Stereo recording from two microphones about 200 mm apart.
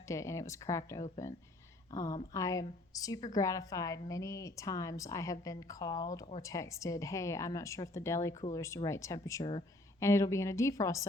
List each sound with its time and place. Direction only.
0.1 s a woman's voice: 15° left (ahead or behind)